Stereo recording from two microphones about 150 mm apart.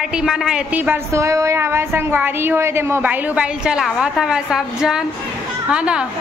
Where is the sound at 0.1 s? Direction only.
5° right (ahead or behind).